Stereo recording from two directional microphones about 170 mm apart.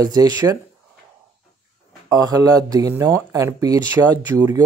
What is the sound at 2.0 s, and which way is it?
Speech, 20° right (ahead or behind).